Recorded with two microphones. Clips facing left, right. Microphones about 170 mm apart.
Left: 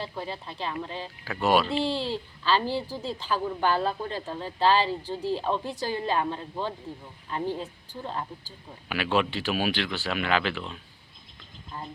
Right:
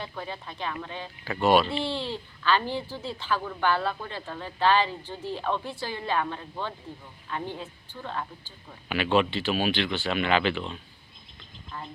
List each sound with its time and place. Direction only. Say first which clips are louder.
0.1 s a woman's voice: left 2 dB; 30° left (ahead or behind)
1.2 s speech: right 2 dB; 5° left (ahead or behind)
1.8 s a woman's voice: left 3 dB; 35° left (ahead or behind)
8.9 s speech: right 2 dB; 5° left (ahead or behind)